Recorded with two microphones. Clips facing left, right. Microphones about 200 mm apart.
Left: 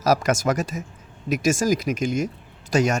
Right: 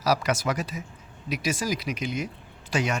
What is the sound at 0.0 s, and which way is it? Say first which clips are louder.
Speech: left 5 dB; 45° left (ahead or behind).